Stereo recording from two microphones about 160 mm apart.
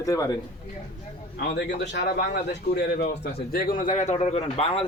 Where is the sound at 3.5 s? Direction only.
65° left (ahead or behind); by 4.8 s 40° left (ahead or behind).